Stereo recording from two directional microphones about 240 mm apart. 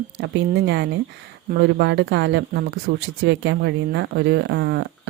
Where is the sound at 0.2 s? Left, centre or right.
Right.